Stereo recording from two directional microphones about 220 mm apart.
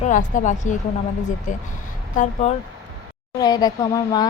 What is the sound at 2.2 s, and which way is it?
Speech, 30° left (ahead or behind).